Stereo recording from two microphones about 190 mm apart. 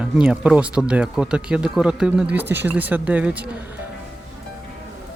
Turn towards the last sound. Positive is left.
turn(degrees=-10)  # may be behind; listen again after turning